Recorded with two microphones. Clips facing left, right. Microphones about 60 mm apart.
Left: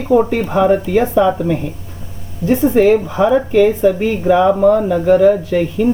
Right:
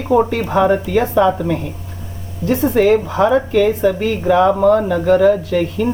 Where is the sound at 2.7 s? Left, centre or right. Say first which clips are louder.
Even; centre.